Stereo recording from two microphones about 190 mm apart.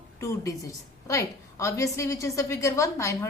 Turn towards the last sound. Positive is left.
turn(degrees=15)  # may be behind; listen again after turning